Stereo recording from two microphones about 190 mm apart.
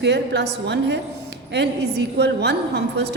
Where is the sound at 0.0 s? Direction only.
65° right (ahead or behind).